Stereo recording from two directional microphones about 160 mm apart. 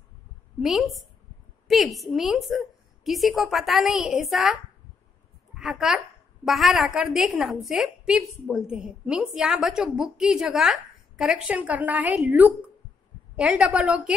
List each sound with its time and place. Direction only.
0.6 s a woman's voice: centre (ahead or behind)